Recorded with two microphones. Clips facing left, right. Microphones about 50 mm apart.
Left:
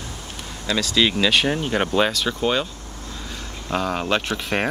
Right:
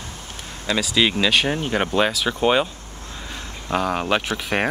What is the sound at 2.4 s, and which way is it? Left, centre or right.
Speech, right.